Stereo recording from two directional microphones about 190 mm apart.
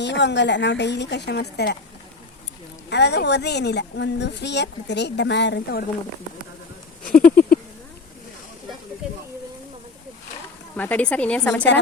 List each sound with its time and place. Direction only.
0.0 s speech: 65° left (ahead or behind)
2.9 s speech: 65° left (ahead or behind)
7.0 s a sound: 50° left (ahead or behind)
10.8 s a woman's voice: 10° left (ahead or behind)